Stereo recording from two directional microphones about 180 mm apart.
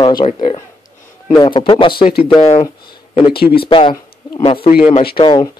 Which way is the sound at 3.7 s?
25° left (ahead or behind).